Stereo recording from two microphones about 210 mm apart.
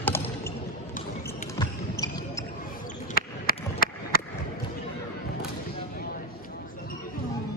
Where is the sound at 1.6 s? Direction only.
15° left (ahead or behind).